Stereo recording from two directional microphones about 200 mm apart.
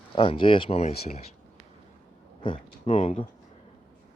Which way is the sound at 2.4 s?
30° left (ahead or behind).